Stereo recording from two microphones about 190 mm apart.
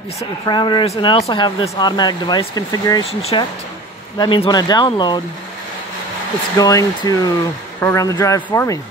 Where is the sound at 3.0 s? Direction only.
30° left (ahead or behind).